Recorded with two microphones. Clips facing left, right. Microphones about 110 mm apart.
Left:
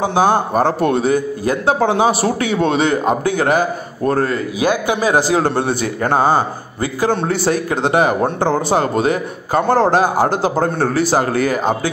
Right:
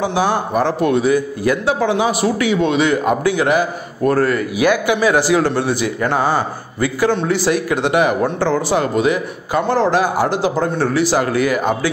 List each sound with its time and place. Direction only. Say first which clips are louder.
0.6 s a man's voice: left 1 dB; 40° left (ahead or behind)
4.1 s a man's voice: right 1 dB; 25° left (ahead or behind)
4.8 s a man's voice: right 1 dB; 40° left (ahead or behind)
6.2 s a man's voice: left 3 dB; 25° left (ahead or behind)
7.1 s a man's voice: left 1 dB; 45° left (ahead or behind)